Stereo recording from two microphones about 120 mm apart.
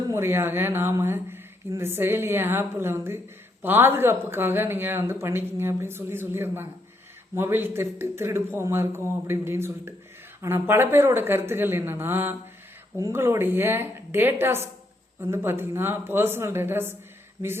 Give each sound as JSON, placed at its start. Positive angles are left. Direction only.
{"t": 0.1, "sound": "speech", "side_deg": -20}